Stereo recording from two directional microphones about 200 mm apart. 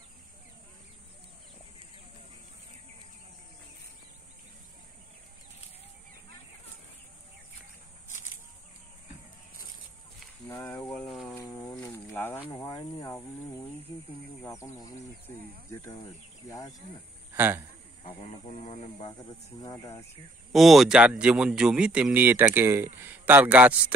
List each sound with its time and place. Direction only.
10.5 s speech: 15° left (ahead or behind)
11.3 s a sound: 20° left (ahead or behind)
11.7 s snake: 10° left (ahead or behind)
14.4 s speech: 15° left (ahead or behind)
17.3 s a sound: 10° right (ahead or behind)
18.0 s speech: 35° left (ahead or behind)
19.6 s speech: 15° left (ahead or behind)
20.5 s a man's voice: centre (ahead or behind)